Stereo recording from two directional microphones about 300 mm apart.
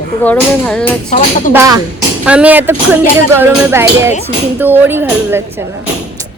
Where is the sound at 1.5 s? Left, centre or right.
Centre.